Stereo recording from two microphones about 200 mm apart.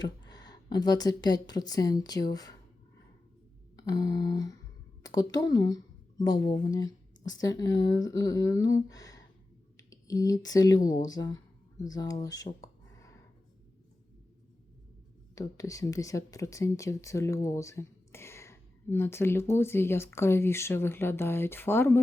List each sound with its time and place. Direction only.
0.0 s speech: 20° left (ahead or behind)
3.8 s a sound: 20° left (ahead or behind)
5.0 s speech: 20° left (ahead or behind)
6.8 s a sound: 70° left (ahead or behind)
7.4 s speech: 15° left (ahead or behind)
15.4 s speech: 15° left (ahead or behind)